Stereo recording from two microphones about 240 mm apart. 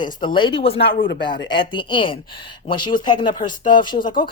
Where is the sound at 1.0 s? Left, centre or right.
Left.